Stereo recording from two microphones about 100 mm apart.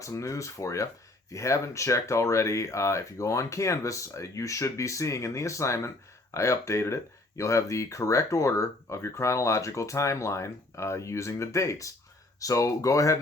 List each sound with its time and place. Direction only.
0.0 s speech: 30° left (ahead or behind)